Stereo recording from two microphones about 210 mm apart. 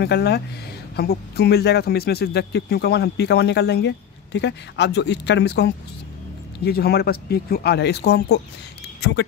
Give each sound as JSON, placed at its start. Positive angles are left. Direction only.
{"t": 0.0, "sound": "speech", "side_deg": 50}